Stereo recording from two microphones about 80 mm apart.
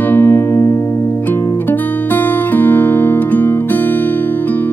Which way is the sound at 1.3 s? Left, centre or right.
Left.